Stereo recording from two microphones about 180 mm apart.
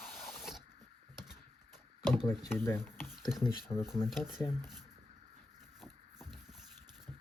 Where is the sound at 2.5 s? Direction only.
15° left (ahead or behind).